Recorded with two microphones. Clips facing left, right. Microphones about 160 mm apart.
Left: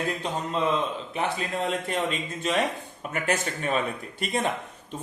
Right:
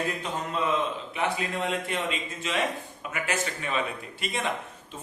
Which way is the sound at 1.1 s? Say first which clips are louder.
Left 1 dB; 35° left (ahead or behind).